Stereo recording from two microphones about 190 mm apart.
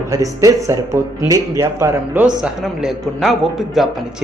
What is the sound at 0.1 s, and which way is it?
A man's voice, 15° right (ahead or behind).